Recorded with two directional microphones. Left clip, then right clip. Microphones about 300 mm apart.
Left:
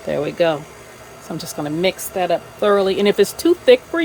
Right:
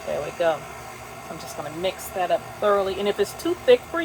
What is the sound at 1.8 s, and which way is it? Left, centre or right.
Speech, left.